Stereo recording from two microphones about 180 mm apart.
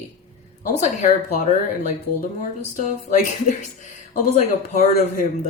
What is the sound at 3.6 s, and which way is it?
Speech, 45° left (ahead or behind).